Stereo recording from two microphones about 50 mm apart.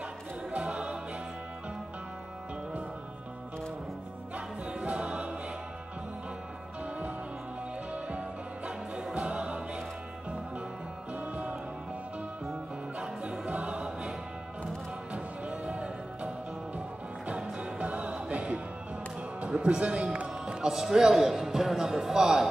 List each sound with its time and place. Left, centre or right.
0.5 s choir: right
4.6 s music: right
7.9 s music: right
11.1 s music: right
13.0 s music: centre
15.1 s music: right
17.4 s music: right
19.4 s a man's voice: centre